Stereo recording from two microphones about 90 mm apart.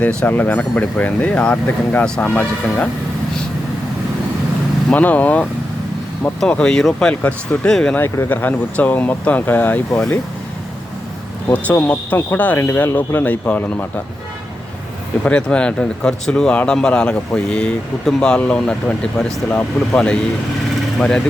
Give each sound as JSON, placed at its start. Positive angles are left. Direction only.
{"t": 0.0, "sound": "speech", "side_deg": 10}
{"t": 4.9, "sound": "speech", "side_deg": 15}
{"t": 6.5, "sound": "speech", "side_deg": 10}
{"t": 7.9, "sound": "speech", "side_deg": 25}
{"t": 11.4, "sound": "speech", "side_deg": 20}
{"t": 15.2, "sound": "speech", "side_deg": 10}